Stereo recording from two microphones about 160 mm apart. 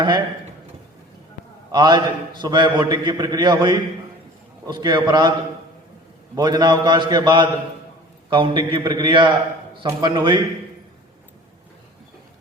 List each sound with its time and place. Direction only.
1.7 s a man's voice: 30° right (ahead or behind)
6.3 s a man's voice: 25° right (ahead or behind)